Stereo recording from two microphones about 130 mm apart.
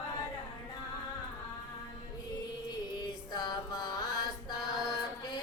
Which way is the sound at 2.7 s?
35° left (ahead or behind).